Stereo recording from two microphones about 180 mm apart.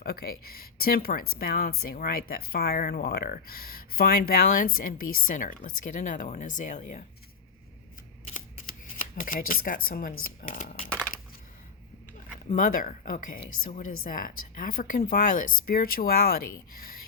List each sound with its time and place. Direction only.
0.0 s speech: 60° left (ahead or behind)
9.2 s speech: 50° left (ahead or behind)
12.5 s speech: 45° left (ahead or behind)